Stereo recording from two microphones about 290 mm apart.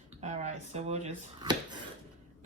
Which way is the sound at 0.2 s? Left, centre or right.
Right.